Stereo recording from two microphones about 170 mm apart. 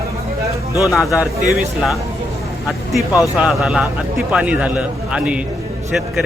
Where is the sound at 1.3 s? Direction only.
Centre (ahead or behind).